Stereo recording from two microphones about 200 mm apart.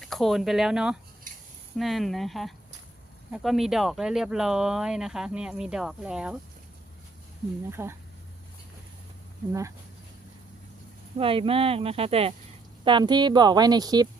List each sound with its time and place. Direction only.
0.0 s speech: centre (ahead or behind)
7.7 s speech: 10° right (ahead or behind)
9.5 s speech: 15° right (ahead or behind)
11.2 s speech: 25° right (ahead or behind)